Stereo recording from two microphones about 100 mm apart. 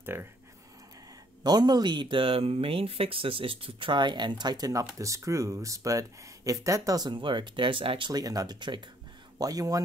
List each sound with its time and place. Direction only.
0.0 s speech: 25° right (ahead or behind)
1.4 s speech: 45° right (ahead or behind); by 8.1 s 60° right (ahead or behind)
8.1 s speech: 40° right (ahead or behind)
9.4 s speech: 40° right (ahead or behind)